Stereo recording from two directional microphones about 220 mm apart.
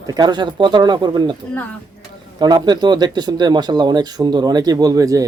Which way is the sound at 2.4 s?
20° right (ahead or behind).